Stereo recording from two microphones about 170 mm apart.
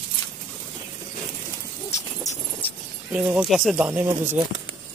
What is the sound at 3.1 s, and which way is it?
Speech, 10° right (ahead or behind).